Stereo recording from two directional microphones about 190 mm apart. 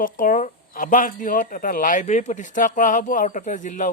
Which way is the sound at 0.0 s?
45° left (ahead or behind).